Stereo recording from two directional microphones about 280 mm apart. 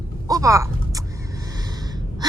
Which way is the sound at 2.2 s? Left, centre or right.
Centre.